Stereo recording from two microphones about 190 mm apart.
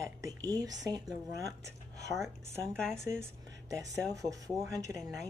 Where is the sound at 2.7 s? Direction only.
5° left (ahead or behind).